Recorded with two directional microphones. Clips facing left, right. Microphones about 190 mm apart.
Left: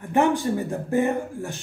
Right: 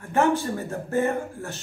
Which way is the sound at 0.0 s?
15° left (ahead or behind).